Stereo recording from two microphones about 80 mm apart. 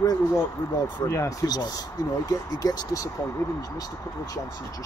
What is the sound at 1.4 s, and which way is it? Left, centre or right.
Speech, left.